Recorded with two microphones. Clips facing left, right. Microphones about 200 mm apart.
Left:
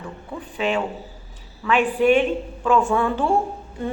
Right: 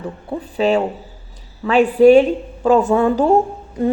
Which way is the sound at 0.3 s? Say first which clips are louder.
Right 7 dB; 35° right (ahead or behind).